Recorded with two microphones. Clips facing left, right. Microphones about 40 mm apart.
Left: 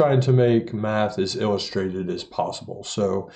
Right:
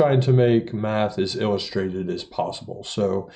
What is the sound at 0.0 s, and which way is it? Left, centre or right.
Speech, centre.